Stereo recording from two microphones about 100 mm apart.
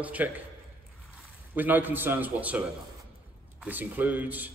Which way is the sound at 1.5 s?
20° right (ahead or behind).